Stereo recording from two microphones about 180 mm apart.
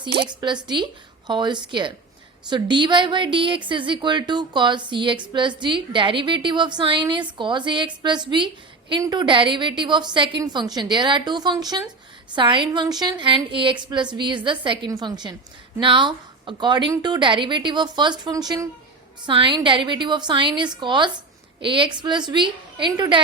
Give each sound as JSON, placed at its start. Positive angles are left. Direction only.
{"t": 0.2, "sound": "a woman's voice", "side_deg": -25}